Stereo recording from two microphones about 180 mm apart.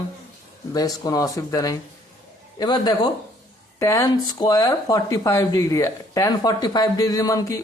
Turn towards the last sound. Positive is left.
turn(degrees=20)  # may be behind; listen again after turning